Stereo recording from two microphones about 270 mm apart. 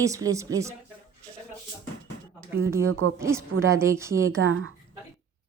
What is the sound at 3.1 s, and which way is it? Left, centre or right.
A woman's voice, centre.